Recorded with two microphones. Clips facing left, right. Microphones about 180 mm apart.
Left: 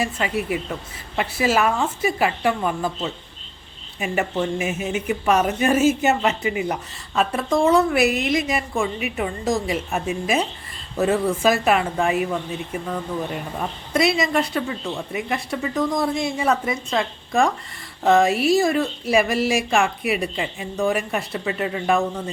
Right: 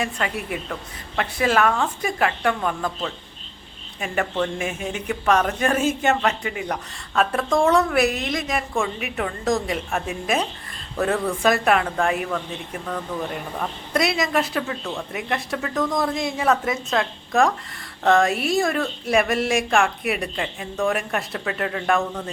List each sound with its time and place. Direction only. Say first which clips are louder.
0.0 s speech: left 3 dB; 5° left (ahead or behind)
13.6 s speech: left 2 dB; centre (ahead or behind)